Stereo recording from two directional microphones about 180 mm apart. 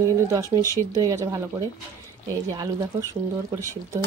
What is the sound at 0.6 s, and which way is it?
Speech, 15° left (ahead or behind).